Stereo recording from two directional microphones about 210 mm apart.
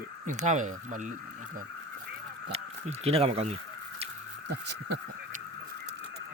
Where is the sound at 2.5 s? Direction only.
30° right (ahead or behind).